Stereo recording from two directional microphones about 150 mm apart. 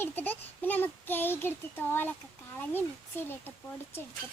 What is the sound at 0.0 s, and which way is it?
Speech, 10° left (ahead or behind).